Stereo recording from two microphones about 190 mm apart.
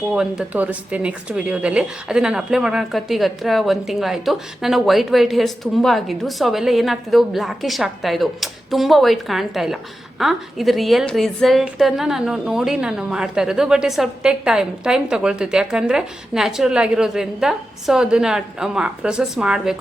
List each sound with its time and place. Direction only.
0.1 s speech: 5° right (ahead or behind)